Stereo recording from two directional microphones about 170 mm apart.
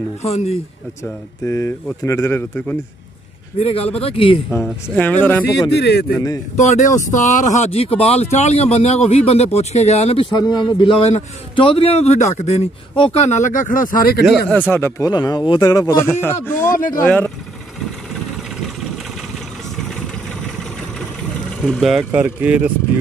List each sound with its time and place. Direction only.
0.2 s a man's voice: 40° left (ahead or behind)
1.0 s speech: 15° left (ahead or behind)
3.5 s a man's voice: 35° left (ahead or behind)
4.6 s speech: 15° left (ahead or behind)
5.7 s speech: 70° left (ahead or behind)
6.1 s speech: 20° left (ahead or behind)
6.5 s a man's voice: 45° left (ahead or behind)
10.3 s a man's voice: 25° left (ahead or behind); by 14.2 s 55° left (ahead or behind)
14.5 s speech: 10° left (ahead or behind)
16.7 s speech: 55° left (ahead or behind)
17.0 s speech: 10° left (ahead or behind)
21.5 s speech: 5° left (ahead or behind)